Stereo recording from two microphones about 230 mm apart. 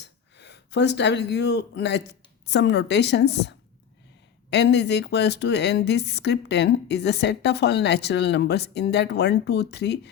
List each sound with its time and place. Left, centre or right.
0.0 s speech: left
4.5 s a woman's voice: left